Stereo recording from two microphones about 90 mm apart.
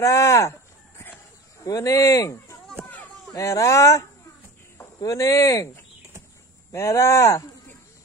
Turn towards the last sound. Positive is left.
turn(degrees=30)  # may be behind; listen again after turning